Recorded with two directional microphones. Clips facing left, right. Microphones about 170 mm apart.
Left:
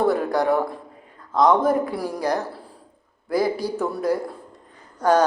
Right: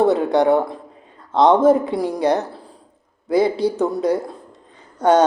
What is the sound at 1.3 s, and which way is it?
A man's voice, 25° right (ahead or behind).